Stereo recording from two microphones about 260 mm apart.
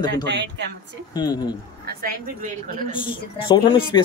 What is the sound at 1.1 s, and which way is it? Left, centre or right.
Speech, centre.